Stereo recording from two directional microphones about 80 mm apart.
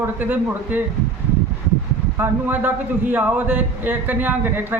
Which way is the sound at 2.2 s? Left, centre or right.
Right.